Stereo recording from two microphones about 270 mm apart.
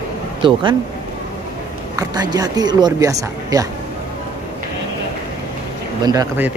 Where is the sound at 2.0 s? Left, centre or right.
Centre.